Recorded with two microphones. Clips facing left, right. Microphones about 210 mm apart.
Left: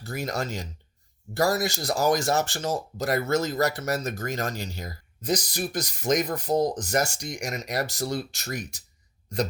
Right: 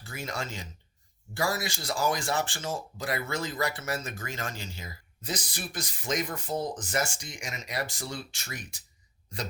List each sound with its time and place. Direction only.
0.0 s speech: 40° left (ahead or behind)